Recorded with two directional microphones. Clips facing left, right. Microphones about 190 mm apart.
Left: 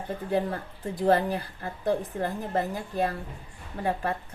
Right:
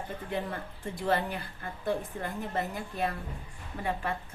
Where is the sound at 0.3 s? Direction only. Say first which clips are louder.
Left 8 dB; 35° left (ahead or behind).